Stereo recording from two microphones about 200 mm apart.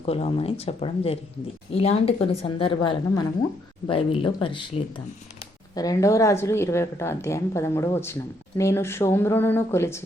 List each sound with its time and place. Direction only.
0.0 s a woman's voice: 30° left (ahead or behind); by 10.0 s 15° left (ahead or behind)